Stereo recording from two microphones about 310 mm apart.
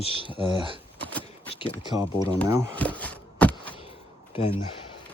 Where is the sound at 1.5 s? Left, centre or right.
Centre.